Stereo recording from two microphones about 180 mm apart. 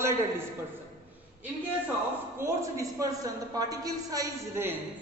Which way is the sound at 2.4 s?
15° right (ahead or behind).